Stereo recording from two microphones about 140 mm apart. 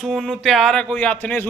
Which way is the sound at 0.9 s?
10° left (ahead or behind).